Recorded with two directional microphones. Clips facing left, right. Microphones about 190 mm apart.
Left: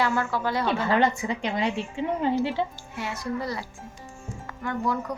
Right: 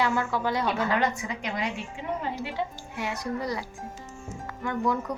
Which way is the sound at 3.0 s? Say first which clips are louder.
Even; 15° right (ahead or behind).